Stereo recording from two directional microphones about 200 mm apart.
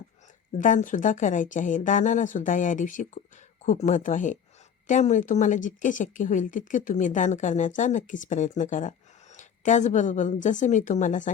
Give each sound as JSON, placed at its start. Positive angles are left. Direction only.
{"t": 0.6, "sound": "speech", "side_deg": 40}